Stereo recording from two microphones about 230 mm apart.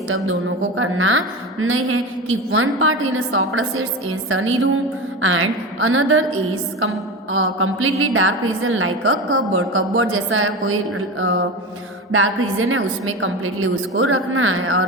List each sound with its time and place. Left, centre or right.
0.8 s a woman's voice: right
7.3 s a woman's voice: right